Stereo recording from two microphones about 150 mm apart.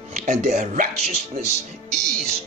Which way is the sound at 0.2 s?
50° right (ahead or behind).